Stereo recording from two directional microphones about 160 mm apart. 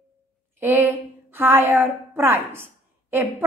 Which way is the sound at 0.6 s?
15° right (ahead or behind).